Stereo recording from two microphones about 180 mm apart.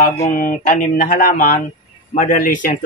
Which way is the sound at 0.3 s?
50° left (ahead or behind).